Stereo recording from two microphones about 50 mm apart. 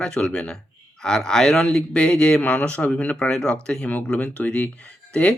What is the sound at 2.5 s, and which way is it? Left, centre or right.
A man's voice, left.